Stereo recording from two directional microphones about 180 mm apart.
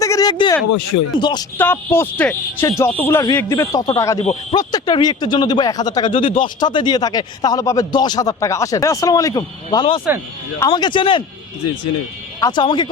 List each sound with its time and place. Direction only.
0.0 s a sound: 20° left (ahead or behind)
1.2 s speech: 25° left (ahead or behind)
1.5 s speech: 10° left (ahead or behind); by 11.2 s 25° left (ahead or behind)
12.4 s speech: 25° left (ahead or behind)